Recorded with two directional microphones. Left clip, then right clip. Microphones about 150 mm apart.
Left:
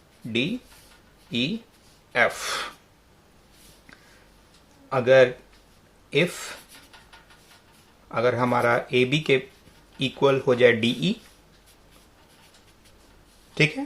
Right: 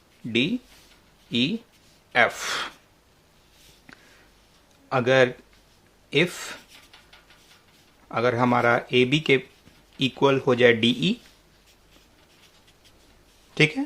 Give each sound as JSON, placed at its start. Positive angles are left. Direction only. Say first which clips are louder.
{"t": 1.3, "sound": "speech", "louder": "right 2 dB", "side_deg": -35}
{"t": 4.9, "sound": "speech", "louder": "left 3 dB", "side_deg": -40}
{"t": 8.1, "sound": "speech", "louder": "right 1 dB", "side_deg": -35}
{"t": 13.5, "sound": "speech", "louder": "right 1 dB", "side_deg": -35}